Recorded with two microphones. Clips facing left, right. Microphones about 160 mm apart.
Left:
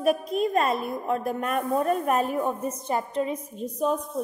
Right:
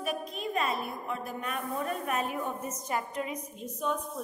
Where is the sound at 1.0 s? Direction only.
45° left (ahead or behind).